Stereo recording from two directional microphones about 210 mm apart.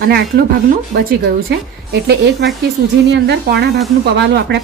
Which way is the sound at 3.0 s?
55° right (ahead or behind).